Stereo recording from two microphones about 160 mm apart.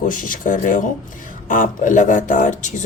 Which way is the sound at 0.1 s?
55° left (ahead or behind).